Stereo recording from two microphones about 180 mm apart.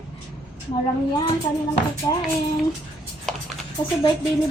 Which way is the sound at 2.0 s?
25° left (ahead or behind).